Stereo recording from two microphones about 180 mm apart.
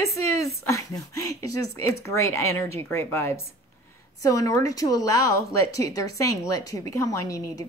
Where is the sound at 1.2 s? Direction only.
15° left (ahead or behind).